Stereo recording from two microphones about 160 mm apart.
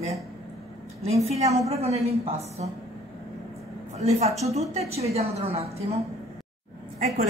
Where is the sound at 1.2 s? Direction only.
40° right (ahead or behind).